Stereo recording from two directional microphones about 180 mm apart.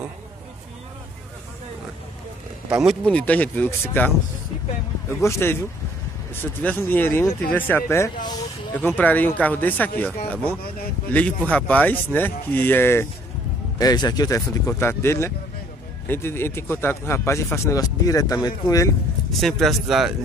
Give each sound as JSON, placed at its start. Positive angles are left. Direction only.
{"t": 2.7, "sound": "speech", "side_deg": -5}
{"t": 5.2, "sound": "speech", "side_deg": 15}
{"t": 8.8, "sound": "speech", "side_deg": 10}
{"t": 19.3, "sound": "speech", "side_deg": 0}